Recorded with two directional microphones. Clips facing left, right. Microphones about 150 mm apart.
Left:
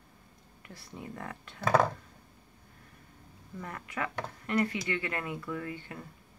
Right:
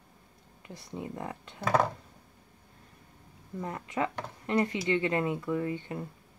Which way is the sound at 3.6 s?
25° right (ahead or behind).